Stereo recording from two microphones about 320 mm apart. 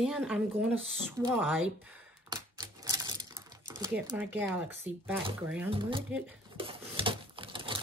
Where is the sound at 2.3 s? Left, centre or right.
Centre.